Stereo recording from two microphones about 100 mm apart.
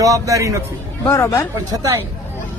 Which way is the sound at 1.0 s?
30° left (ahead or behind).